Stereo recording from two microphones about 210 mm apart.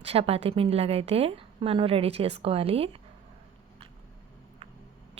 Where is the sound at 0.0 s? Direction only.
30° right (ahead or behind).